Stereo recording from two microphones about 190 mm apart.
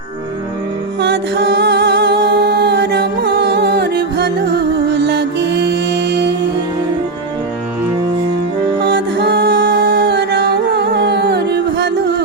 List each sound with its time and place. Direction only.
1.0 s music: 65° right (ahead or behind)
8.8 s music: 65° right (ahead or behind)